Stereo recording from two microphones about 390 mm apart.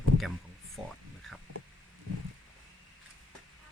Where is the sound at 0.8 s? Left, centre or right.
Centre.